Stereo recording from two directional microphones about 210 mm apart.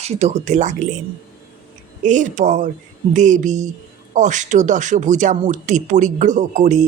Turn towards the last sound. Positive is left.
turn(degrees=-35)  # may be behind; listen again after turning